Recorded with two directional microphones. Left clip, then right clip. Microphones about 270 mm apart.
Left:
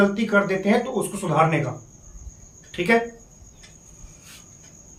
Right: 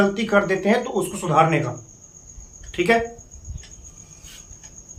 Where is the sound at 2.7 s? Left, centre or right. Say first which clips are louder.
Right 1 dB; centre.